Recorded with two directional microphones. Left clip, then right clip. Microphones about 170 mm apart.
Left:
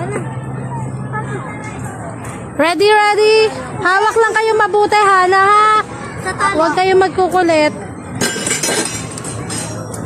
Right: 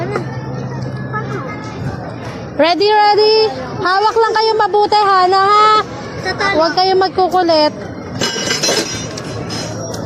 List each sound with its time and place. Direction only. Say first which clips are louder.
2.6 s a woman's voice: even; 5° left (ahead or behind)
3.8 s a woman's voice: even; 10° left (ahead or behind)